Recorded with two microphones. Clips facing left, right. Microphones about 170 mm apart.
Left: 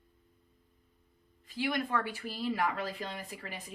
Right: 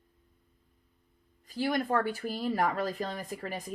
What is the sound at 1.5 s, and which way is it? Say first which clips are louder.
Speech: right 4 dB; 40° right (ahead or behind).